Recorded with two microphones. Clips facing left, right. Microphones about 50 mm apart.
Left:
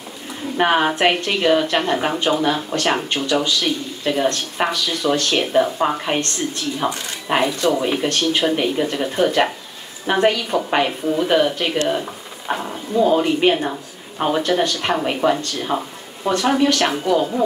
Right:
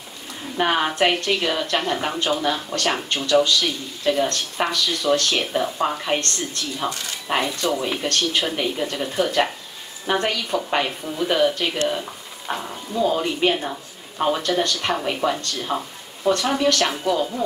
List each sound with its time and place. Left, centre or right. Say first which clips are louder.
0.6 s speech: left 3 dB; centre